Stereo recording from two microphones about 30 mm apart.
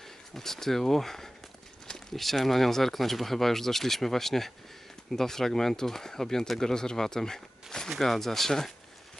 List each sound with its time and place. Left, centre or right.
0.3 s speech: centre